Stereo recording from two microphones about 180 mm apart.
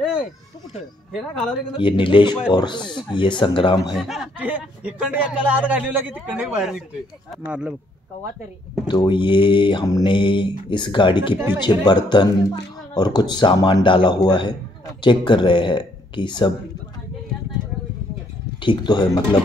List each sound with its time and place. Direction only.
1.8 s speech: 30° left (ahead or behind)
3.9 s a man's voice: centre (ahead or behind)
8.8 s speech: 25° left (ahead or behind)
11.3 s a man's voice: 10° right (ahead or behind)
11.6 s speech: 25° left (ahead or behind)
18.6 s speech: 25° left (ahead or behind)